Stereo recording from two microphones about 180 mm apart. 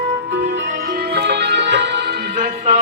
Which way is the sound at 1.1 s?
70° right (ahead or behind).